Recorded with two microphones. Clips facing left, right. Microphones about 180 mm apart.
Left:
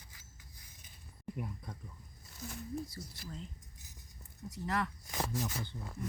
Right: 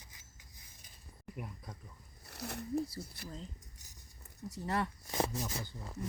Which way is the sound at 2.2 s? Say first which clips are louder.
Right 3 dB; 70° right (ahead or behind).